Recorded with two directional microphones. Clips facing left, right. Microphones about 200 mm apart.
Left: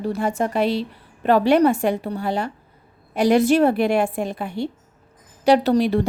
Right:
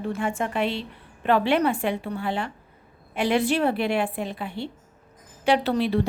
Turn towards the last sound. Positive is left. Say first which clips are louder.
# left 5 dB
turn(degrees=45)  # may be behind; listen again after turning